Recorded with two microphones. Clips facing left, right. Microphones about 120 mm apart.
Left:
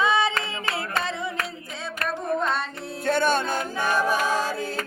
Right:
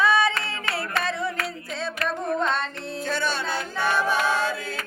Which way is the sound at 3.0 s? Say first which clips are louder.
Left 6 dB; 55° left (ahead or behind).